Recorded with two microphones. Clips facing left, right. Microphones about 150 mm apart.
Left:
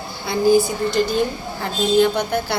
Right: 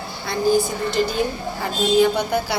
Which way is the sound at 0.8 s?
Centre (ahead or behind).